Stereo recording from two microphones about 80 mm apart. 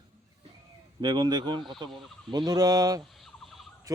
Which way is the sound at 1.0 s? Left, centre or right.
Right.